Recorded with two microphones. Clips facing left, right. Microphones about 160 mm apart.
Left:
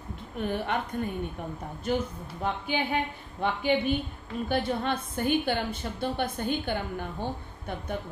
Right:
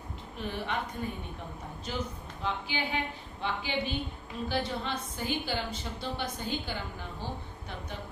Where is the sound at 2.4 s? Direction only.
55° left (ahead or behind).